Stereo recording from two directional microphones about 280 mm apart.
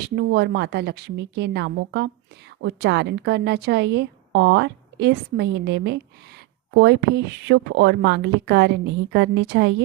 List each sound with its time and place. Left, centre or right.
0.0 s a woman's voice: right